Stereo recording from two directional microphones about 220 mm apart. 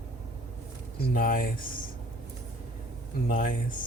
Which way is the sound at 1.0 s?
40° left (ahead or behind).